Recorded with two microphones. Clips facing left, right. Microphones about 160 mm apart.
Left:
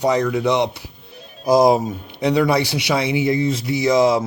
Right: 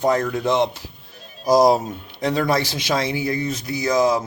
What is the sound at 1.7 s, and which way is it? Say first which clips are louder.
Speech: left 2 dB; 10° left (ahead or behind).